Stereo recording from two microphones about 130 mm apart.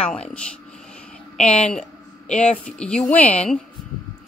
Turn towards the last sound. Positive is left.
turn(degrees=5)  # may be behind; listen again after turning